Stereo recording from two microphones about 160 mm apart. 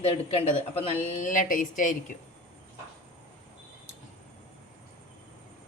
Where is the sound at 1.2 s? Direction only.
55° left (ahead or behind).